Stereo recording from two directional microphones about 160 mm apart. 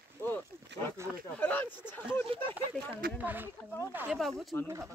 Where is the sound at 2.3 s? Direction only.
35° right (ahead or behind).